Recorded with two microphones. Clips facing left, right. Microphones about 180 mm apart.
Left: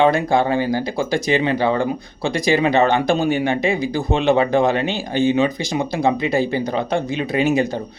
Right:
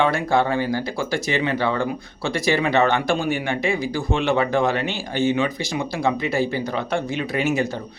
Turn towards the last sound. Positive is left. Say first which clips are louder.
# left 3 dB
turn(degrees=20)  # may be behind; listen again after turning